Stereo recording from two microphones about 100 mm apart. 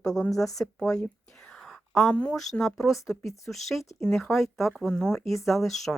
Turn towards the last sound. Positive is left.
turn(degrees=0)  # may be behind; listen again after turning